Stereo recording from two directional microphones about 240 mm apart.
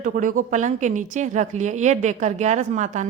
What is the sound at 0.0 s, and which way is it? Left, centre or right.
A woman's voice, right.